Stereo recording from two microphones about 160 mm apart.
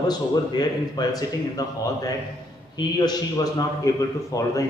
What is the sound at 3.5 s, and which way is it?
A man's voice, 20° left (ahead or behind).